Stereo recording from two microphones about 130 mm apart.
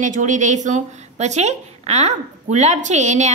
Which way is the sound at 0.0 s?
70° right (ahead or behind).